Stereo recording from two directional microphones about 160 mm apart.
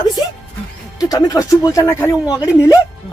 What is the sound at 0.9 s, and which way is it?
Speech, 20° left (ahead or behind).